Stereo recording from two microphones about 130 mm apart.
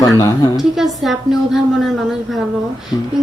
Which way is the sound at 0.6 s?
Centre (ahead or behind).